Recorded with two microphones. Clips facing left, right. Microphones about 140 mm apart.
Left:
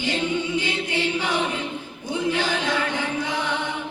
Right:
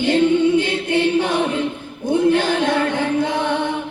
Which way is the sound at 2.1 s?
55° right (ahead or behind).